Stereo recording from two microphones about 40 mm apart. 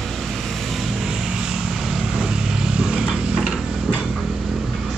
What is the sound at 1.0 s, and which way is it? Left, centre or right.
Vehicle, centre.